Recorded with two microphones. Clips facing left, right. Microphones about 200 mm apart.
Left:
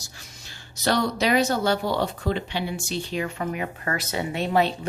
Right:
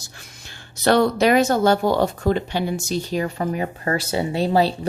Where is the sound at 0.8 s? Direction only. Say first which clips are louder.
Right 7 dB; 55° right (ahead or behind).